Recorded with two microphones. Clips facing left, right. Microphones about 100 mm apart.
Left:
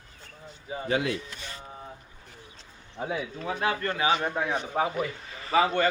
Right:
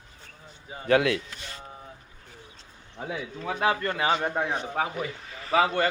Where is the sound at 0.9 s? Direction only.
70° right (ahead or behind).